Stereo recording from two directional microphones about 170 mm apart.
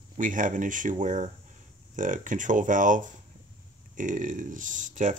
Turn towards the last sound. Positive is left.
turn(degrees=-45)  # may be behind; listen again after turning